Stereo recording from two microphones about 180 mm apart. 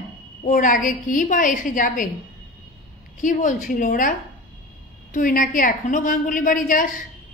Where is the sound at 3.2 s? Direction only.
45° left (ahead or behind).